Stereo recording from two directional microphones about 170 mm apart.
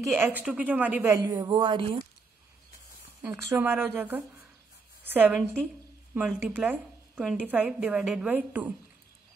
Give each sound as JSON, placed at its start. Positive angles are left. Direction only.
{"t": 0.0, "sound": "a woman's voice", "side_deg": -10}
{"t": 3.2, "sound": "a woman's voice", "side_deg": -15}